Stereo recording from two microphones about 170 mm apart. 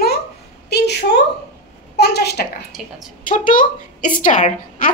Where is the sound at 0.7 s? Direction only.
80° left.